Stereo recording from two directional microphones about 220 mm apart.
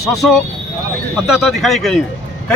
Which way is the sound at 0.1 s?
Centre (ahead or behind).